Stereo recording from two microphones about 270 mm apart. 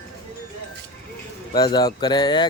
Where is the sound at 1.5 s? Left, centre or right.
Centre.